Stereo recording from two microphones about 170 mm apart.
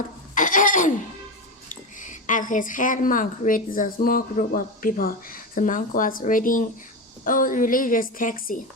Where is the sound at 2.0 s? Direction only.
50° left (ahead or behind).